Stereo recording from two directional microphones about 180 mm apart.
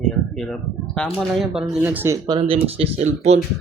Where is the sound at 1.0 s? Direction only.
5° left (ahead or behind).